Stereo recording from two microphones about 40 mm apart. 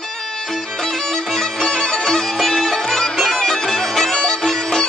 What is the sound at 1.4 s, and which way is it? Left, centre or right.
Music, centre.